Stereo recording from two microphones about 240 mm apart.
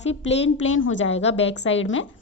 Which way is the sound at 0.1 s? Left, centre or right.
Left.